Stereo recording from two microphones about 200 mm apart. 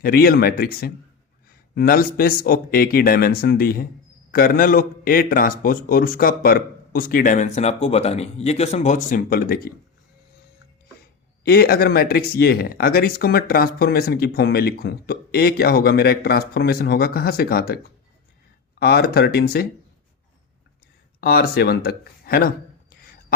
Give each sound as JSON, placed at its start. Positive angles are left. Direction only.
{"t": 0.0, "sound": "speech", "side_deg": 50}
{"t": 11.4, "sound": "speech", "side_deg": 50}
{"t": 18.8, "sound": "speech", "side_deg": 50}
{"t": 21.2, "sound": "speech", "side_deg": 50}